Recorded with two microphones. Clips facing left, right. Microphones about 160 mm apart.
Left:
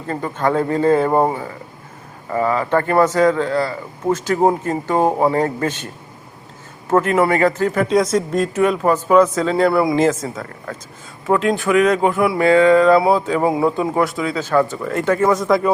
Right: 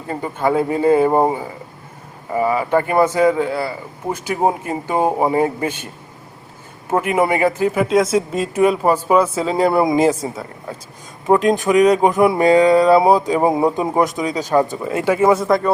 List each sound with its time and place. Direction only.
0.1 s speech: 10° right (ahead or behind)
6.9 s speech: 15° right (ahead or behind)